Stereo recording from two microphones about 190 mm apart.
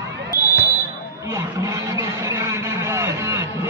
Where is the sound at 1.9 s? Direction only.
15° right (ahead or behind).